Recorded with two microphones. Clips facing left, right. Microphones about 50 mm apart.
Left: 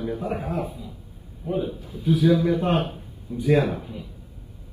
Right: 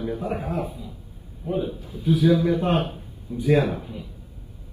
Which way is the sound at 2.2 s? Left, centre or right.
Centre.